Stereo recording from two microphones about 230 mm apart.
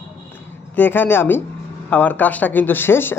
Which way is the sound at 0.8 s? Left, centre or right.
Centre.